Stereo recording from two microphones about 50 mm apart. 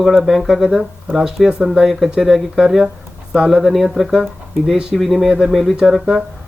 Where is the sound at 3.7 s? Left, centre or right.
Centre.